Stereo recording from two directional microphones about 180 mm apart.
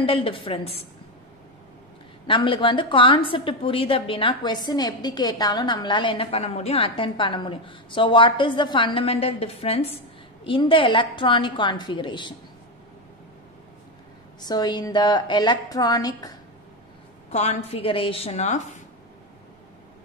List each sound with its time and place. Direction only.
0.0 s a woman's voice: 30° left (ahead or behind)
2.2 s a woman's voice: 30° left (ahead or behind)
14.4 s a woman's voice: 25° left (ahead or behind)
17.3 s a woman's voice: 35° left (ahead or behind)